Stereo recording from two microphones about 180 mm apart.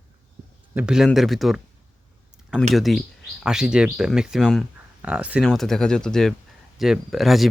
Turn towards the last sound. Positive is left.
turn(degrees=0)  # may be behind; listen again after turning